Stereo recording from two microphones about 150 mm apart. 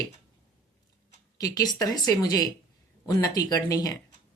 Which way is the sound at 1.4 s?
25° left (ahead or behind).